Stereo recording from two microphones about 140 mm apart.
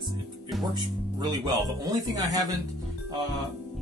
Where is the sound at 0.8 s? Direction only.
30° right (ahead or behind).